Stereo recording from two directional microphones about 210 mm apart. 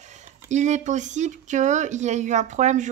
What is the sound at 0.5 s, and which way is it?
Speech, 35° right (ahead or behind).